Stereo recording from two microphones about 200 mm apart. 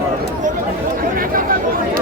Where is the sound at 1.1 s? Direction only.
45° right (ahead or behind).